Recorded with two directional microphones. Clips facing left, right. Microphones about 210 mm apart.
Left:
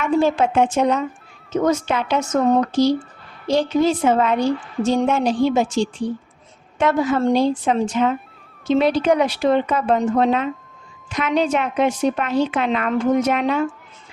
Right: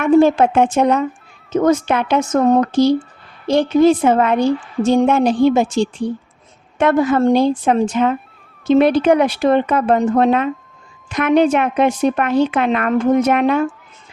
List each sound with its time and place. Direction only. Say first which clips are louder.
0.0 s a woman's voice: right 6 dB; 55° right (ahead or behind)